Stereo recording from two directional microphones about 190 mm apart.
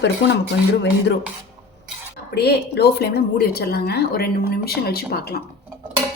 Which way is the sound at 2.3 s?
60° left (ahead or behind).